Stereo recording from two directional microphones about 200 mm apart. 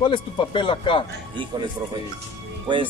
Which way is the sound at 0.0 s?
25° left (ahead or behind).